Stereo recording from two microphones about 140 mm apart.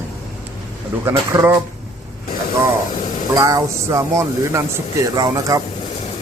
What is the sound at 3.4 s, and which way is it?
Speech, 25° right (ahead or behind).